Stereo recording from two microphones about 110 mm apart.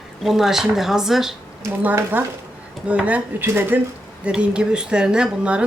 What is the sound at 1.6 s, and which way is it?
Speech, 20° right (ahead or behind).